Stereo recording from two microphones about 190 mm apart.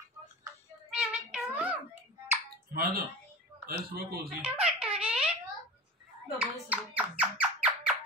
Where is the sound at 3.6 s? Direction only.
55° right (ahead or behind).